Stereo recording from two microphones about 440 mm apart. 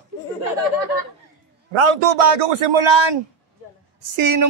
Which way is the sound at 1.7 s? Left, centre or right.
Right.